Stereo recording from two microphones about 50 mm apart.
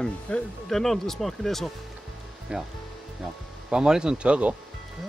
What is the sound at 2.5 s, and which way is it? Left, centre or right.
Speech, right.